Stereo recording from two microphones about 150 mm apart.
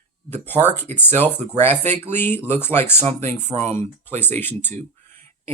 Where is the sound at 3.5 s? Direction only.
50° right (ahead or behind).